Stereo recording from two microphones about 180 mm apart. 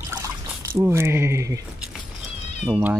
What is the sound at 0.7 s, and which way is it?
Speech, 15° right (ahead or behind).